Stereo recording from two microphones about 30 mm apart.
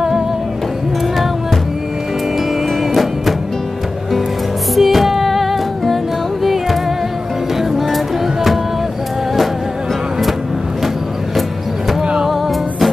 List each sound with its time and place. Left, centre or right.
2.9 s music: centre
4.7 s music: centre
12.0 s music: right